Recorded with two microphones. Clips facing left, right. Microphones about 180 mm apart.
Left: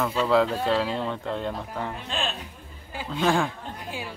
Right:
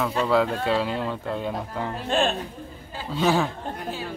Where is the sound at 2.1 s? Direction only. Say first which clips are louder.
Right 11 dB; 50° right (ahead or behind).